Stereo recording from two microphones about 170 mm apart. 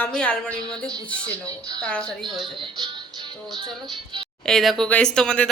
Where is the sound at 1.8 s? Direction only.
5° left (ahead or behind).